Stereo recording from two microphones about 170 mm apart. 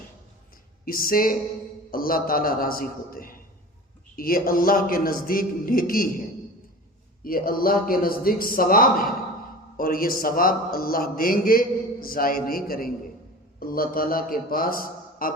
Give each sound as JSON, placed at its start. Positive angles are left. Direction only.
{"t": 0.9, "sound": "a man's voice", "side_deg": 60}
{"t": 7.3, "sound": "a man's voice", "side_deg": 60}